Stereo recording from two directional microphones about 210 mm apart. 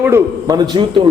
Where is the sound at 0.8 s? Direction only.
25° right (ahead or behind).